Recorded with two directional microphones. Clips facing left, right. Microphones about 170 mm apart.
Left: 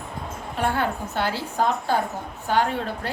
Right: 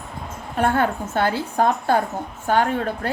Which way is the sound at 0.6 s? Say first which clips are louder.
Right 4 dB; 50° right (ahead or behind).